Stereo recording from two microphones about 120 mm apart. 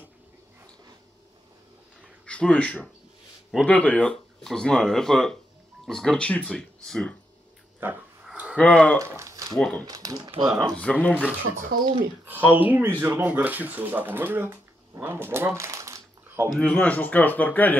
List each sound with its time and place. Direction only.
2.2 s speech: 10° left (ahead or behind)
7.8 s dog: 15° right (ahead or behind)
8.5 s speech: 10° left (ahead or behind)
9.0 s a sound: 25° right (ahead or behind)
9.5 s speech: 5° left (ahead or behind)
9.8 s speech: 30° right (ahead or behind)
10.4 s speech: centre (ahead or behind)
10.8 s speech: 10° left (ahead or behind)
11.8 s speech: 40° right (ahead or behind)
12.3 s speech: 15° right (ahead or behind)
16.5 s speech: 10° left (ahead or behind)